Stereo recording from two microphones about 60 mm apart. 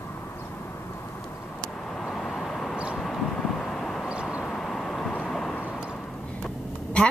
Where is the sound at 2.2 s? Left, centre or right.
Centre.